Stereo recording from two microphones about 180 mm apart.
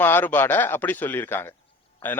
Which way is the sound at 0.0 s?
10° left (ahead or behind).